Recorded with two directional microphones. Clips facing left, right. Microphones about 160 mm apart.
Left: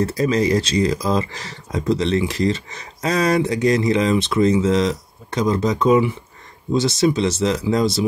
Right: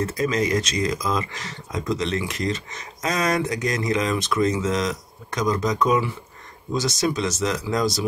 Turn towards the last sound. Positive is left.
turn(degrees=25)  # may be behind; listen again after turning